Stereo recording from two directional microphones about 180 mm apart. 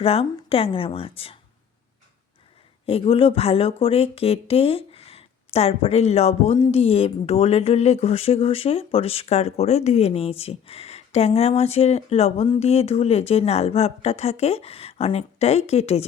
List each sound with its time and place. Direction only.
0.0 s speech: 30° left (ahead or behind)
2.8 s speech: 30° left (ahead or behind)